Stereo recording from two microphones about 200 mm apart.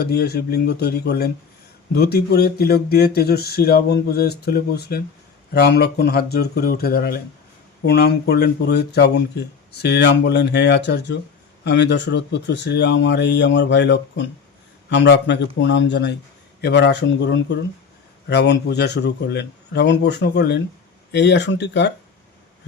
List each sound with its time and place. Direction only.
0.0 s speech: 55° left (ahead or behind)